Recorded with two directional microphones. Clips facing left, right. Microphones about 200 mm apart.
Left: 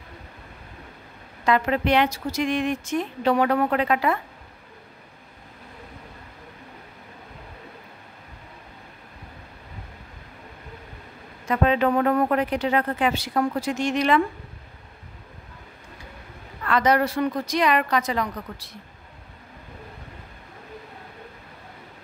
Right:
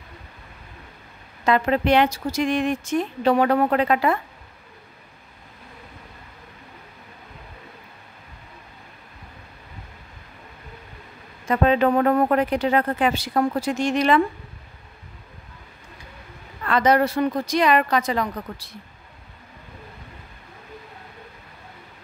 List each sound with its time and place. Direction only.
1.4 s speech: 30° right (ahead or behind)
11.4 s speech: 35° right (ahead or behind)
16.6 s a woman's voice: 25° right (ahead or behind)